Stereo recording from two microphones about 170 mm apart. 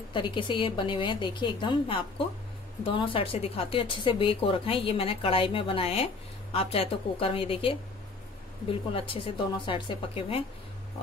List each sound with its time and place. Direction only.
0.1 s a woman's voice: 30° left (ahead or behind)